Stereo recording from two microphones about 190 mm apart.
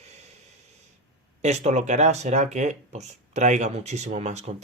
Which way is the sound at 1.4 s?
35° right (ahead or behind).